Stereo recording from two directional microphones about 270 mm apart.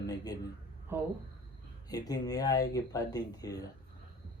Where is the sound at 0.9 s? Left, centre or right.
Centre.